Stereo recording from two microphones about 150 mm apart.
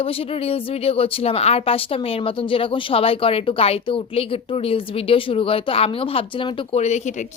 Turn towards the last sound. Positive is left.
turn(degrees=45)  # may be behind; listen again after turning